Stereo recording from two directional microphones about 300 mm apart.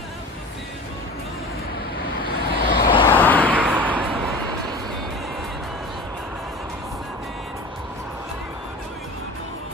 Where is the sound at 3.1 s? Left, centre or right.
Centre.